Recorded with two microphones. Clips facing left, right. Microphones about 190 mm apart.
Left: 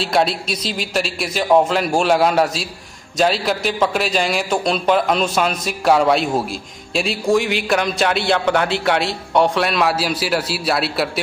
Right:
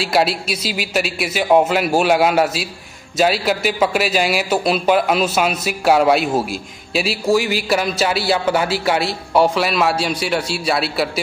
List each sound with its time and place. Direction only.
0.0 s a man's voice: 5° right (ahead or behind)